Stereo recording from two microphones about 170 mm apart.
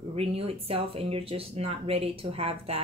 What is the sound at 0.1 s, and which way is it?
Speech, 35° right (ahead or behind).